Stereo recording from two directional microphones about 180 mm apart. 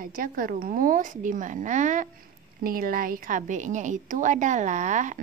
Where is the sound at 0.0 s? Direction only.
50° right (ahead or behind).